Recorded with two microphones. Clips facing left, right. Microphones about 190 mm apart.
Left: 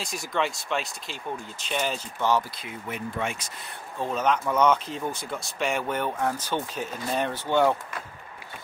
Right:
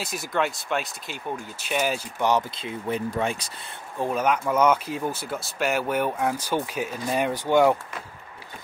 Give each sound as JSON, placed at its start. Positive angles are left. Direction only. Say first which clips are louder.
{"t": 0.0, "sound": "speech", "louder": "right 2 dB", "side_deg": -5}
{"t": 4.0, "sound": "speech", "louder": "right 2 dB", "side_deg": -10}